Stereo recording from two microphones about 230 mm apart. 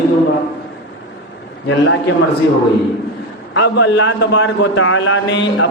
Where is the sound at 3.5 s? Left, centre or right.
Left.